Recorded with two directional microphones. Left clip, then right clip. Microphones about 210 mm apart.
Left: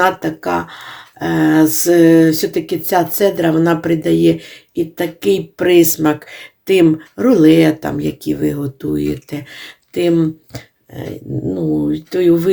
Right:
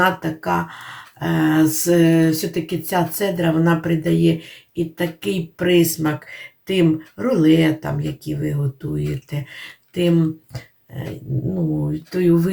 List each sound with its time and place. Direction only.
0.0 s speech: 40° left (ahead or behind)